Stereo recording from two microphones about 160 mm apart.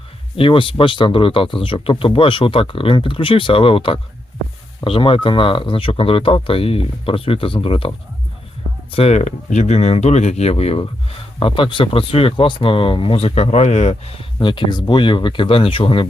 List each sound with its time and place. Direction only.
0.3 s speech: 35° left (ahead or behind)